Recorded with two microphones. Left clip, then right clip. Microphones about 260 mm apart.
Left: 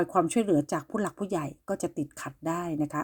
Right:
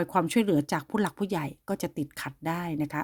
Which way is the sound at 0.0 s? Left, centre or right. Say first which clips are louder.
Even; right.